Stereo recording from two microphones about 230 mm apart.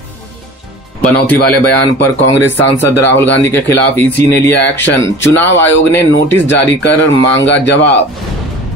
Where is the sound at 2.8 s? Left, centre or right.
Centre.